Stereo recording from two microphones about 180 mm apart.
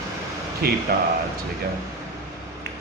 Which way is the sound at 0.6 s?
60° right (ahead or behind).